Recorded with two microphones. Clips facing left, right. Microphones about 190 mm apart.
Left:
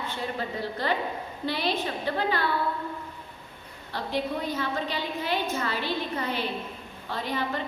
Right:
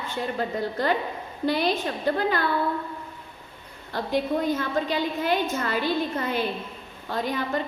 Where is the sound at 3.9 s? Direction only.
45° right (ahead or behind).